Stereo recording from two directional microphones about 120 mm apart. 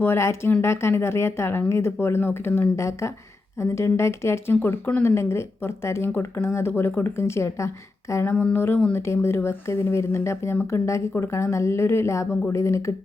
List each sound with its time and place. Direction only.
0.0 s speech: 20° left (ahead or behind)